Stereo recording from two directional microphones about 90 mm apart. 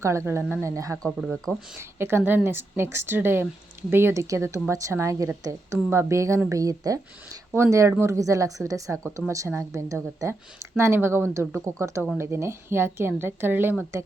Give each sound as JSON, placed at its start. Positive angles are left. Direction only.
{"t": 0.0, "sound": "a woman's voice", "side_deg": -30}